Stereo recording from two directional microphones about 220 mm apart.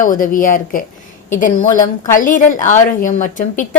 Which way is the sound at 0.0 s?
40° left (ahead or behind).